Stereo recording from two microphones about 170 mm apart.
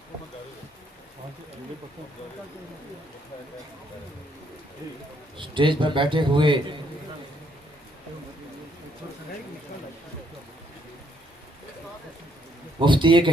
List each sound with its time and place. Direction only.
5.4 s speech: 30° right (ahead or behind)
12.8 s speech: 30° right (ahead or behind)